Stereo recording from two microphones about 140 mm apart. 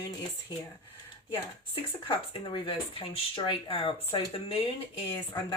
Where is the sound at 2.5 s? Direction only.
35° left (ahead or behind).